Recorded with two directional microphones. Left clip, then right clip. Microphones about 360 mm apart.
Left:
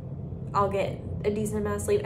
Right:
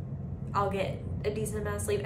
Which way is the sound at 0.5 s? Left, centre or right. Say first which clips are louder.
Left 4 dB; centre.